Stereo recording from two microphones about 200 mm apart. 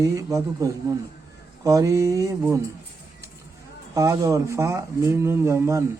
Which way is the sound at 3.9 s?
15° right (ahead or behind).